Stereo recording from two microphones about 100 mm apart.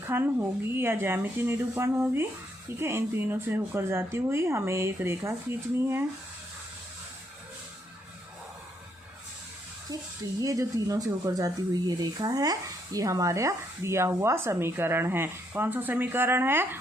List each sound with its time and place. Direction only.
0.1 s speech: 20° right (ahead or behind)
10.4 s speech: 35° right (ahead or behind)